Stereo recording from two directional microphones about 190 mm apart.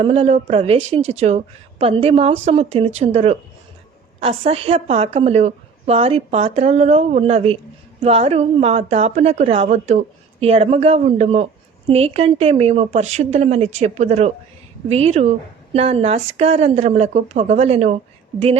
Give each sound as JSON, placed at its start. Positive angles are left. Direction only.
{"t": 0.0, "sound": "a woman's voice", "side_deg": -30}